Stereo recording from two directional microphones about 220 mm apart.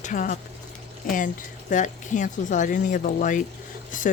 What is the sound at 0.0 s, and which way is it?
A woman's voice, 35° left (ahead or behind).